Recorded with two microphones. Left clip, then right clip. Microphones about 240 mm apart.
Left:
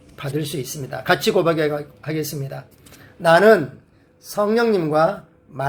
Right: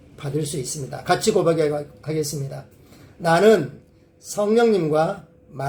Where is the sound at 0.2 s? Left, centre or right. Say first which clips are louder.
Left 1 dB; left.